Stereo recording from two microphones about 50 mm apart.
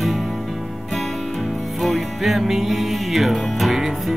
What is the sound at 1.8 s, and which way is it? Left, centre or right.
Music, centre.